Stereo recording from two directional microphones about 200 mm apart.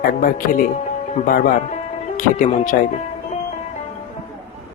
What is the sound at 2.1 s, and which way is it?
Speech, 40° left (ahead or behind).